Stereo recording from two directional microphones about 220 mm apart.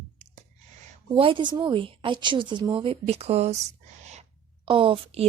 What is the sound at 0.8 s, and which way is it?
A woman's voice, 25° right (ahead or behind).